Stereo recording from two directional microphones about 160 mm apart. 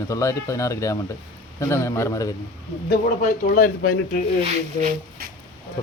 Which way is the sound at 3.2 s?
60° left (ahead or behind).